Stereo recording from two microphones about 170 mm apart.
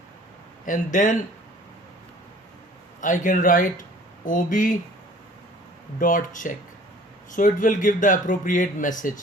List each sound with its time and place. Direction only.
0.6 s speech: 50° left (ahead or behind)
3.0 s speech: 50° left (ahead or behind)
6.0 s speech: 50° left (ahead or behind)